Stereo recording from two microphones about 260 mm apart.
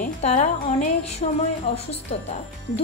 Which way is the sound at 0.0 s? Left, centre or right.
Left.